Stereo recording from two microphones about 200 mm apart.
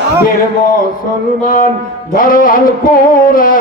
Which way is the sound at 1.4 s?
45° left (ahead or behind).